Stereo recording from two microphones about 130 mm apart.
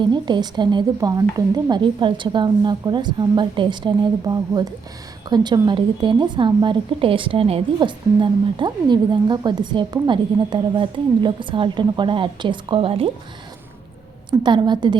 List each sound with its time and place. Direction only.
0.0 s a woman's voice: 35° right (ahead or behind)
14.3 s a woman's voice: 35° right (ahead or behind)